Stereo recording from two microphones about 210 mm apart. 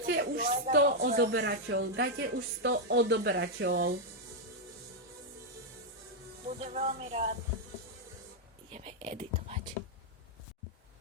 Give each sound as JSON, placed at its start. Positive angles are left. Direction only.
{"t": 0.0, "sound": "a sound", "side_deg": -50}
{"t": 0.4, "sound": "speech", "side_deg": -30}
{"t": 0.7, "sound": "a woman's voice", "side_deg": -45}
{"t": 6.6, "sound": "speech", "side_deg": -30}
{"t": 8.7, "sound": "whispering", "side_deg": -30}